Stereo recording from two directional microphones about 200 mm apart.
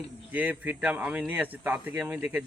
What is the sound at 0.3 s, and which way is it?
Speech, 10° right (ahead or behind).